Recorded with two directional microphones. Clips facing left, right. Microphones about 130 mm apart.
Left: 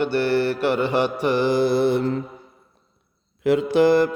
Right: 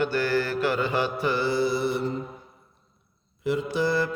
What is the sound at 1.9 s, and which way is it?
Mantra, 90° left.